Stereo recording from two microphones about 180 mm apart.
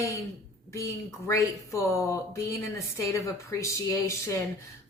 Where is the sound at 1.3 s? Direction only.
15° left (ahead or behind).